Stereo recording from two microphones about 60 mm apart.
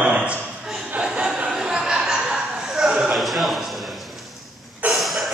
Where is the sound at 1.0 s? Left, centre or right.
Centre.